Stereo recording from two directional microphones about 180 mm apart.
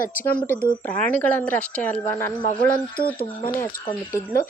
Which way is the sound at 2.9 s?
55° left (ahead or behind).